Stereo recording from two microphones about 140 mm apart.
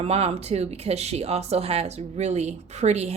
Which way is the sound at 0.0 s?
45° right (ahead or behind).